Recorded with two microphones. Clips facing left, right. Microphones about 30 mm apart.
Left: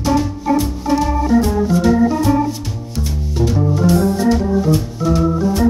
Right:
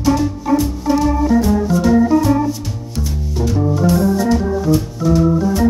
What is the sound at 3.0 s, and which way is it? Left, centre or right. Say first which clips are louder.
Music: left 2 dB; centre.